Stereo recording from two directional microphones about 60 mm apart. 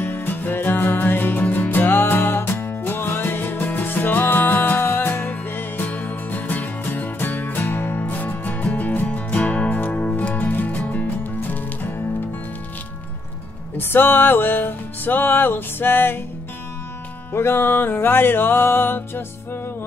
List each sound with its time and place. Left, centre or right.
0.0 s music: left
13.7 s music: left
17.3 s music: left